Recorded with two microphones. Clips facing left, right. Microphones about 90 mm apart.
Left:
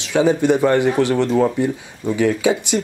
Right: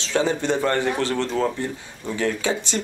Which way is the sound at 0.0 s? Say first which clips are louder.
Left 6 dB; 15° left (ahead or behind).